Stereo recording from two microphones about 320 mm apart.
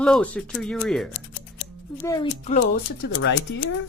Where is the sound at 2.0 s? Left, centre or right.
Centre.